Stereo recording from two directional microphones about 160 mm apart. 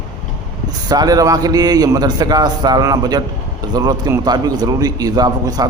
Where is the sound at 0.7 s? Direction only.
25° right (ahead or behind).